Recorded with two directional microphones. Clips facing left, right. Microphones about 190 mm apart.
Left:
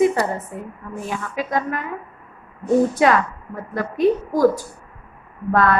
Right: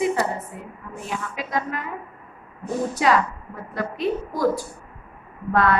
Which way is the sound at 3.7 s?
45° left (ahead or behind).